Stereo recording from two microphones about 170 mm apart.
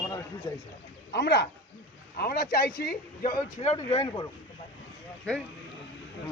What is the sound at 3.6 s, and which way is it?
Speech, 45° left (ahead or behind).